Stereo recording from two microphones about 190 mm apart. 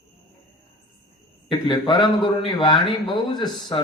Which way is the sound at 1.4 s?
25° left (ahead or behind).